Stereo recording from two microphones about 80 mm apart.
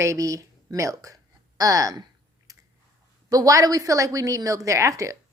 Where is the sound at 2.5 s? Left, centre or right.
Right.